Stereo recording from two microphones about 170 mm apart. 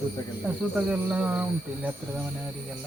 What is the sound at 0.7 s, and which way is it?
Speech, 5° right (ahead or behind).